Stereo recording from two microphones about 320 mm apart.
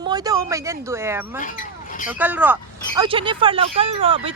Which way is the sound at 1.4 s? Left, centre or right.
Left.